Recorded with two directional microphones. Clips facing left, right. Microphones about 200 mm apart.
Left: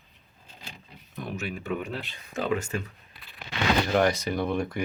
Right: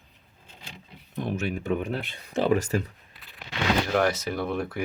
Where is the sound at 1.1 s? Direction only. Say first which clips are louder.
Right 5 dB; 25° right (ahead or behind).